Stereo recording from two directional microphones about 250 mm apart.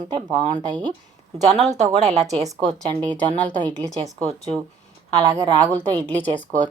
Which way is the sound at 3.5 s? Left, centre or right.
Centre.